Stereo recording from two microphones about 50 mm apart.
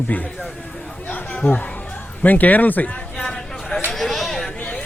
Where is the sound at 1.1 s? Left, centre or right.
Left.